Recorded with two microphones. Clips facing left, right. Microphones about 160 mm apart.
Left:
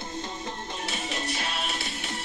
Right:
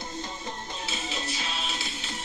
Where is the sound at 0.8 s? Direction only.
65° left (ahead or behind).